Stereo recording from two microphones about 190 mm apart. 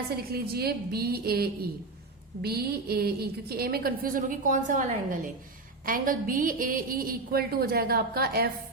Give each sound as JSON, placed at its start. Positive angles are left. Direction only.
{"t": 0.2, "sound": "a woman's voice", "side_deg": -55}